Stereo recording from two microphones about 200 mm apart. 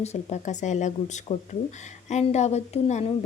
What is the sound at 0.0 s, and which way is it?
A woman's voice, 35° left (ahead or behind).